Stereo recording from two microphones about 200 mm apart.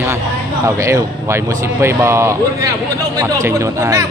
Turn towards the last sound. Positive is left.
turn(degrees=-15)  # may be behind; listen again after turning